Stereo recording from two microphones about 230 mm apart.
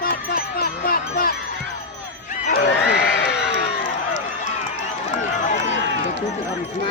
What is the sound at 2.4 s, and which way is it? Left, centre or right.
Run, left.